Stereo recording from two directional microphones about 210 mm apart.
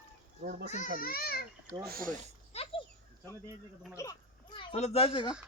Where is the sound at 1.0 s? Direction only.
45° left (ahead or behind).